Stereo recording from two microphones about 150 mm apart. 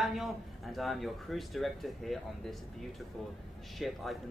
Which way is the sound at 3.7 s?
Centre (ahead or behind).